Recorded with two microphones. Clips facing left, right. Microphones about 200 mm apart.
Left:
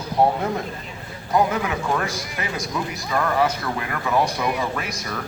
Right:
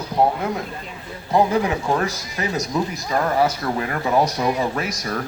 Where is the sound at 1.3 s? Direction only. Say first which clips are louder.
Right 3 dB; 30° right (ahead or behind).